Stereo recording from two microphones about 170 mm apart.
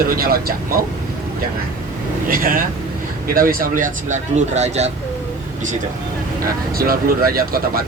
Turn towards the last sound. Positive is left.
turn(degrees=-60)  # may be behind; listen again after turning